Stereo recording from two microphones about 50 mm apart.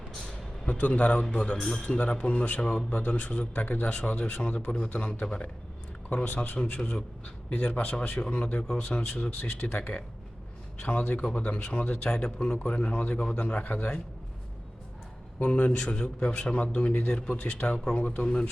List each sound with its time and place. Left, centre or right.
0.3 s a sound: left
1.3 s speech: left
1.5 s a man's voice: centre
1.8 s speech: left
6.2 s speech: left
6.6 s speech: left
7.5 s speech: left
9.4 s speech: left
15.4 s speech: left